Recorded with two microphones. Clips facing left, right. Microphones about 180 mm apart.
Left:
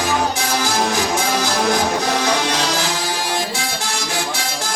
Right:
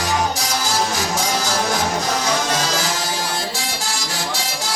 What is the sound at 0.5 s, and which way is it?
Music, 60° left (ahead or behind).